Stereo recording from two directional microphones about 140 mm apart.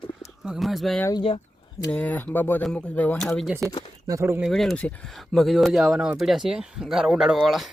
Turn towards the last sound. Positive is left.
turn(degrees=0)  # may be behind; listen again after turning